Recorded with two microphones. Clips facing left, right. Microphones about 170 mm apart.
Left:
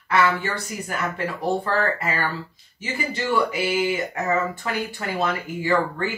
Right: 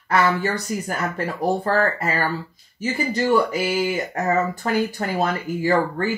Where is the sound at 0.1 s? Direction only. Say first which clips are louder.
Right 2 dB; 40° right (ahead or behind).